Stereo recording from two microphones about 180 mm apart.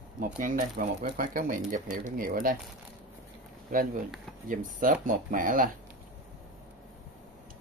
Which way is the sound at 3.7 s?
50° right (ahead or behind).